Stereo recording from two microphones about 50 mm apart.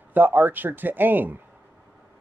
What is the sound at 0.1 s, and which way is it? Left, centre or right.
Speech, right.